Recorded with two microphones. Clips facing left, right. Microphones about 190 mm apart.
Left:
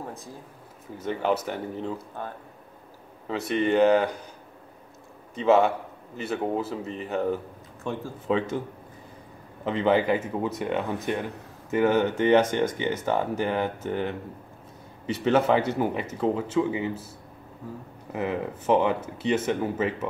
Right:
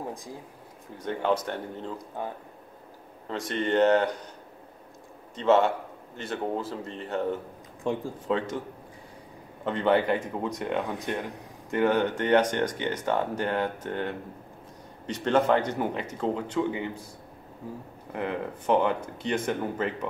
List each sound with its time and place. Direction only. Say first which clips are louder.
0.0 s a sound: right 2 dB; 15° right (ahead or behind)
0.9 s speech: left 1 dB; 5° left (ahead or behind)
2.0 s speech: right 2 dB; 15° right (ahead or behind)
3.3 s speech: left 4 dB; 5° left (ahead or behind)
5.3 s speech: left 2 dB; 10° left (ahead or behind)
7.8 s speech: right 3 dB; 15° right (ahead or behind)
8.3 s speech: left 3 dB; 5° left (ahead or behind)
9.7 s speech: left 1 dB; 5° left (ahead or behind)
18.1 s speech: left 2 dB; 5° left (ahead or behind)